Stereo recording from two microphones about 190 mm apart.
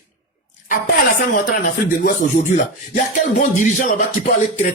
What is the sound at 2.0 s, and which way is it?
Speech, 45° left (ahead or behind).